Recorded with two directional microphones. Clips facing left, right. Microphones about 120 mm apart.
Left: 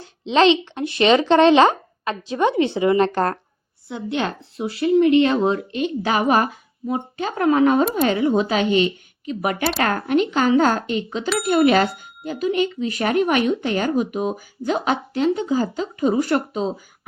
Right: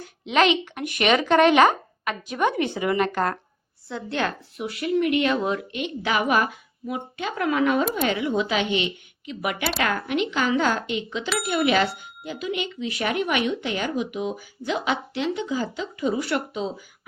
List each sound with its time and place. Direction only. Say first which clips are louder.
0.0 s a woman's voice: left 5 dB; 25° left (ahead or behind)